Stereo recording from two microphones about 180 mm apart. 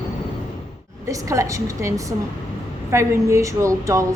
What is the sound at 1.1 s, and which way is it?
A woman's voice, 15° right (ahead or behind).